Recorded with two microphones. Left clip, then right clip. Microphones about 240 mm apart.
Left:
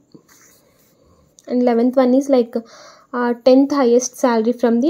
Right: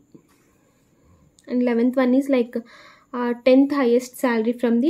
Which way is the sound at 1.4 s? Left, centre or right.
Centre.